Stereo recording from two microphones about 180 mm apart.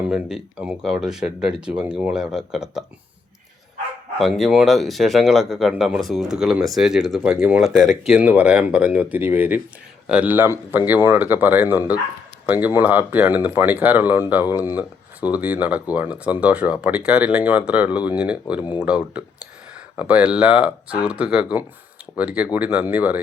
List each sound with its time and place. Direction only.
0.1 s speech: 5° right (ahead or behind)
4.2 s speech: centre (ahead or behind)